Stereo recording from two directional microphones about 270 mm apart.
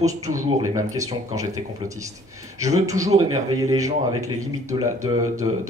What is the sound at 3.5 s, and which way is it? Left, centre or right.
A man's voice, centre.